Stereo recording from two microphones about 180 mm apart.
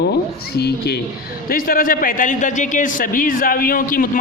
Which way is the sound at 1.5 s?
50° left (ahead or behind).